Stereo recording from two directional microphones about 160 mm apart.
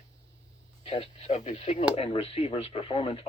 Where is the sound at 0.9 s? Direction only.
40° left (ahead or behind).